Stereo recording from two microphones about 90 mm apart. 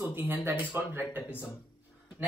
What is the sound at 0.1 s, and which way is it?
Speech, 25° right (ahead or behind).